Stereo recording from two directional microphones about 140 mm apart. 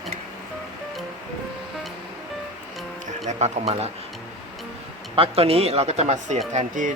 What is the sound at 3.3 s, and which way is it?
Speech, 55° right (ahead or behind).